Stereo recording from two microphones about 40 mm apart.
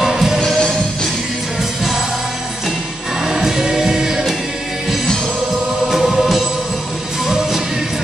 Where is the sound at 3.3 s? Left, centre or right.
Centre.